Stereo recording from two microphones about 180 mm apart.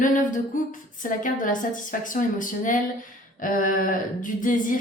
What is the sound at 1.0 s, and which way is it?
Speech, 45° left (ahead or behind).